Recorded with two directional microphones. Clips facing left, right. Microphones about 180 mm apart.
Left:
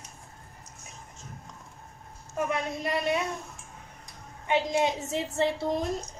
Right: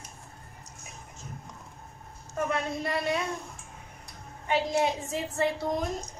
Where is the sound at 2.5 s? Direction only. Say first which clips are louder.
Even; 20° left (ahead or behind).